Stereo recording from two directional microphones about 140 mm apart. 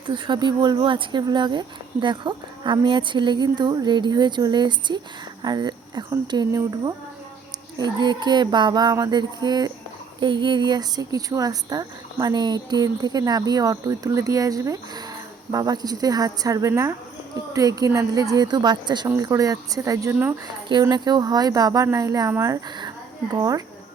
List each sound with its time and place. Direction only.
0.1 s speech: 35° right (ahead or behind)